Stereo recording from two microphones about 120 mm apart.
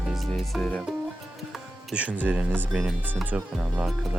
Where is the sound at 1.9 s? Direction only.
10° right (ahead or behind).